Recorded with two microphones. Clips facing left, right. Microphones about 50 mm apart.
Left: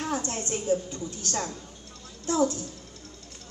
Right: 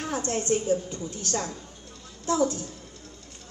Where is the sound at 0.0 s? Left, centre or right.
Right.